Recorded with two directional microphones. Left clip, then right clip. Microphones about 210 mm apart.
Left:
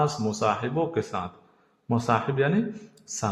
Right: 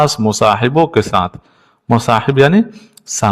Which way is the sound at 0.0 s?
45° right (ahead or behind).